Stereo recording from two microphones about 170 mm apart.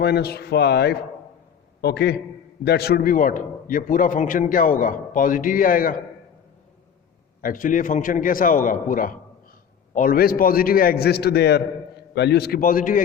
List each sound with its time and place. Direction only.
0.0 s a man's voice: 75° left (ahead or behind); by 6.0 s 55° left (ahead or behind)
7.4 s a man's voice: 50° left (ahead or behind)